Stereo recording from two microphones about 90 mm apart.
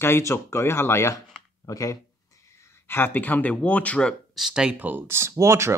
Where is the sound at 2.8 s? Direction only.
25° left (ahead or behind).